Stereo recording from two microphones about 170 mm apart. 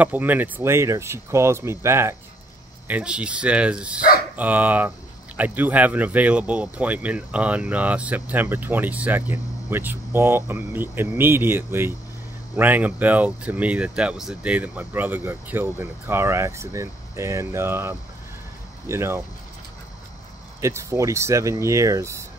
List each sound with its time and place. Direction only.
0.0 s speech: 10° right (ahead or behind)
20.6 s speech: 15° right (ahead or behind)